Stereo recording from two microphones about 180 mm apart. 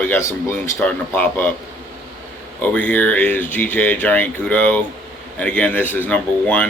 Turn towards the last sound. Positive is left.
turn(degrees=10)  # may be behind; listen again after turning